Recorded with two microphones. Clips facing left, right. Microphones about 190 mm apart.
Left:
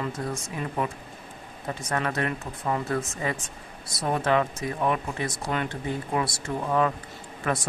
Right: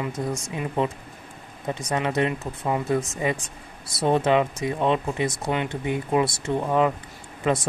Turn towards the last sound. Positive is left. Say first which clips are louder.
# right 5 dB
turn(degrees=-20)  # may be behind; listen again after turning